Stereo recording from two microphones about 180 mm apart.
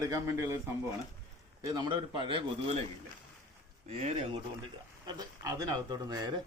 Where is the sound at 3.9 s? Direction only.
40° right (ahead or behind).